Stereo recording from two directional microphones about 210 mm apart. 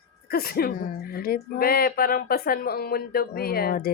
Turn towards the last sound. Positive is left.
turn(degrees=45)  # may be behind; listen again after turning